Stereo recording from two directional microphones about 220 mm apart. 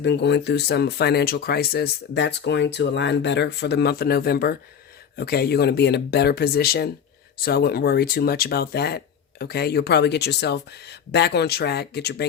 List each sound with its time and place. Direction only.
0.0 s speech: 50° left (ahead or behind)